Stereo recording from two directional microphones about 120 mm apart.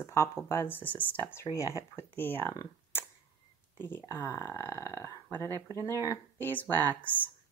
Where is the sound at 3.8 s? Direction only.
20° left (ahead or behind).